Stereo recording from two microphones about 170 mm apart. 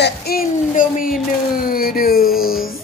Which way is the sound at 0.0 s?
65° left (ahead or behind).